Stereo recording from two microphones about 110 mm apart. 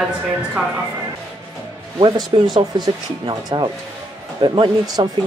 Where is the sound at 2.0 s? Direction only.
40° right (ahead or behind).